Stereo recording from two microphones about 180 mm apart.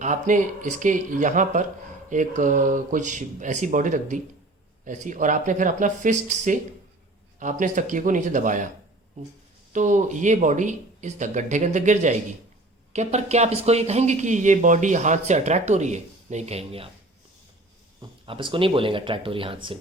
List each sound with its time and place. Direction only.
0.0 s speech: 45° right (ahead or behind)
7.6 s speech: 45° right (ahead or behind)
9.7 s speech: 45° right (ahead or behind)
18.3 s speech: 30° right (ahead or behind)